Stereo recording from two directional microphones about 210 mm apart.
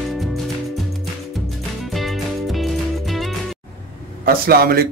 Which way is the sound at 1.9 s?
Centre (ahead or behind).